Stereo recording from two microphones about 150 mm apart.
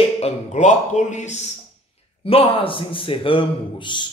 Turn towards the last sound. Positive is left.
turn(degrees=30)  # may be behind; listen again after turning